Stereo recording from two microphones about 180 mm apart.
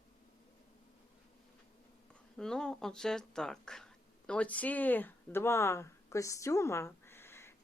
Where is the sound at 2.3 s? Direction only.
5° left (ahead or behind).